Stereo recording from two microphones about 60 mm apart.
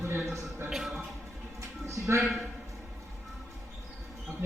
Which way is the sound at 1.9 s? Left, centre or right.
Right.